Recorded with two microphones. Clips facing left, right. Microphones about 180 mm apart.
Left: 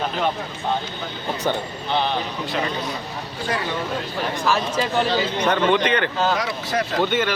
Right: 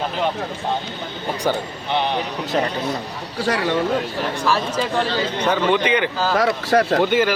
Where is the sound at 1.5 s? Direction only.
10° right (ahead or behind).